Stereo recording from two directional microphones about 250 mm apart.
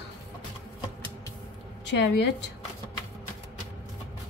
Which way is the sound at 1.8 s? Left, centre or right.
Left.